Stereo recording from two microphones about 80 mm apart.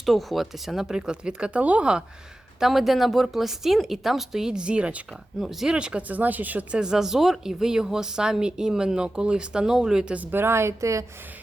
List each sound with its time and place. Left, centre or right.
0.0 s speech: centre
5.4 s speech: centre
10.3 s speech: right